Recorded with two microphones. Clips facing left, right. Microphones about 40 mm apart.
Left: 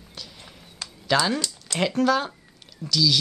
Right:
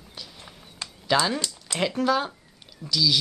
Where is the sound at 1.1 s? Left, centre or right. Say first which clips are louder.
Left 1 dB; centre.